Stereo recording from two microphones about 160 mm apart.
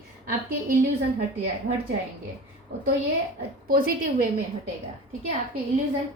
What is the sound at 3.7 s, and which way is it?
Speech, 65° right (ahead or behind).